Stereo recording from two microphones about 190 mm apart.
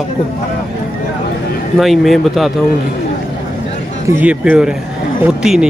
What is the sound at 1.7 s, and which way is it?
Speech, centre (ahead or behind).